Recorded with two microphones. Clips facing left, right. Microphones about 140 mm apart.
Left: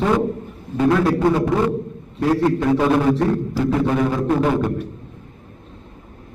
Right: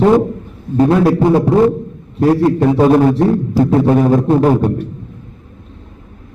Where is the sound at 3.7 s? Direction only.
35° right (ahead or behind).